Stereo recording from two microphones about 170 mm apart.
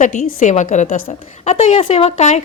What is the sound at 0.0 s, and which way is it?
A woman's voice, 45° left (ahead or behind).